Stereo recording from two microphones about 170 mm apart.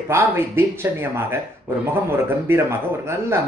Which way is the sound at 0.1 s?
15° right (ahead or behind).